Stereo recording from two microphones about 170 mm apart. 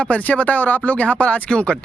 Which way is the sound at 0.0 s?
10° left (ahead or behind).